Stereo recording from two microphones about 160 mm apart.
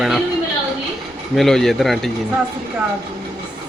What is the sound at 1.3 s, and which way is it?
Speech, centre (ahead or behind).